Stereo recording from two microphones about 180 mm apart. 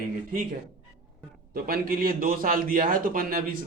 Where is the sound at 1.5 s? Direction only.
55° right (ahead or behind).